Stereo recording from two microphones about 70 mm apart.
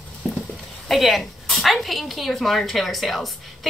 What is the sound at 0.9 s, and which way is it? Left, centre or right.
A woman's voice, centre.